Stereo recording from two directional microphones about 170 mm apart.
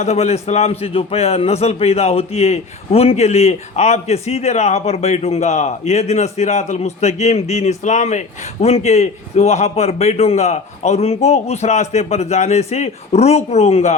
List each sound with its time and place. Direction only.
0.0 s a man's voice: 40° left (ahead or behind)